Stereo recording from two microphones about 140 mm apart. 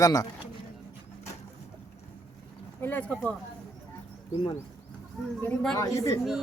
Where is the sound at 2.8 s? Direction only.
10° left (ahead or behind).